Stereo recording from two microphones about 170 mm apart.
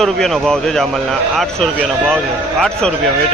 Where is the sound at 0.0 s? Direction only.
Centre (ahead or behind).